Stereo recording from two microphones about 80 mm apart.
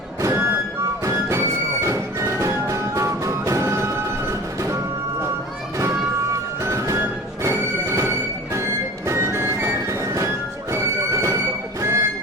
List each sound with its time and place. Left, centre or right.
0.2 s vehicle: right
1.8 s music: right
6.6 s music: right